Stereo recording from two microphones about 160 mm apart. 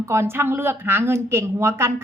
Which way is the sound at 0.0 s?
15° right (ahead or behind).